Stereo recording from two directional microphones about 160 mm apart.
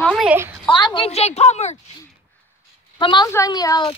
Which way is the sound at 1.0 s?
40° left (ahead or behind).